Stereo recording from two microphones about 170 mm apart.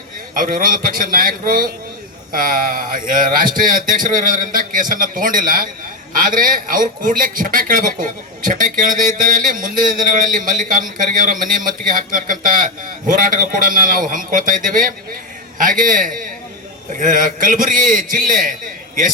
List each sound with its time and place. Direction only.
0.3 s a man's voice: 55° right (ahead or behind)